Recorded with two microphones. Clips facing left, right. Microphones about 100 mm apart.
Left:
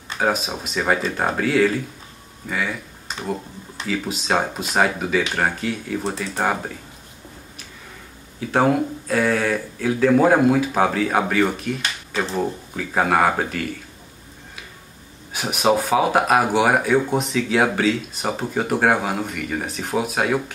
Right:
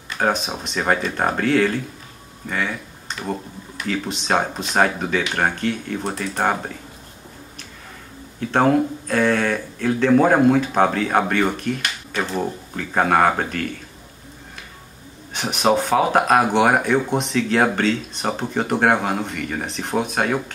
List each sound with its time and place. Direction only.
0.2 s speech: centre (ahead or behind)
3.8 s speech: 5° left (ahead or behind)
8.4 s speech: 5° left (ahead or behind)
15.3 s speech: 5° left (ahead or behind)